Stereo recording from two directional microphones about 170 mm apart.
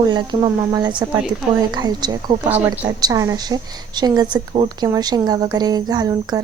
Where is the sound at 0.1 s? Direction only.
25° right (ahead or behind).